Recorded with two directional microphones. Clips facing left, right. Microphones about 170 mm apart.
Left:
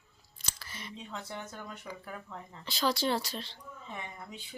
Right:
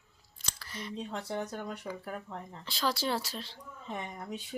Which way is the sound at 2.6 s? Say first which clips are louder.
Left 2 dB; centre (ahead or behind).